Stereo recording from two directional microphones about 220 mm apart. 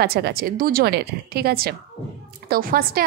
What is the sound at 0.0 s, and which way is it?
A woman's voice, 45° right (ahead or behind).